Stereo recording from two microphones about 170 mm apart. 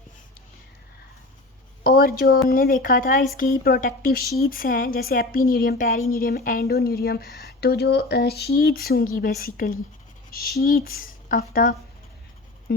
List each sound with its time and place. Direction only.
1.8 s a woman's voice: 60° left (ahead or behind)